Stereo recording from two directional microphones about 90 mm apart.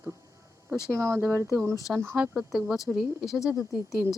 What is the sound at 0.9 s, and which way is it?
Speech, 30° right (ahead or behind).